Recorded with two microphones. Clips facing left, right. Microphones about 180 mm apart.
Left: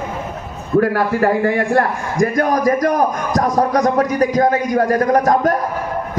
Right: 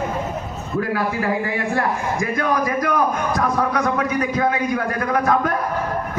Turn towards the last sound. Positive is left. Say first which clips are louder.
# left 5 dB
turn(degrees=40)  # may be behind; listen again after turning